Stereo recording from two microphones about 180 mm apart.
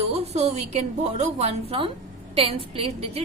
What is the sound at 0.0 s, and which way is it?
A woman's voice, 35° right (ahead or behind).